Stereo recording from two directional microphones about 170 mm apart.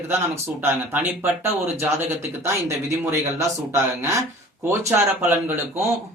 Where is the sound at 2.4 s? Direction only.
15° right (ahead or behind).